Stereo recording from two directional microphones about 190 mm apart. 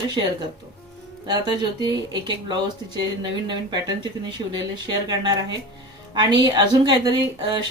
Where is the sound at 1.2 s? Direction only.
20° right (ahead or behind).